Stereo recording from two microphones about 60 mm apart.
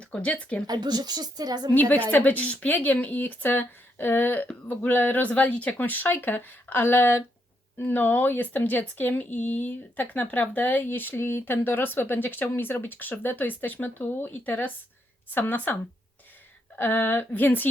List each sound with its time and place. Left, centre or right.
0.0 s speech: centre
1.4 s a woman's voice: right
1.9 s speech: left